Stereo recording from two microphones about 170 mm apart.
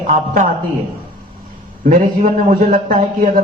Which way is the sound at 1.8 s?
50° right (ahead or behind).